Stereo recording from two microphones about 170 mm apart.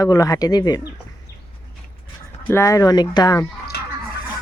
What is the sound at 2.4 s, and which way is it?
Speech, 15° left (ahead or behind).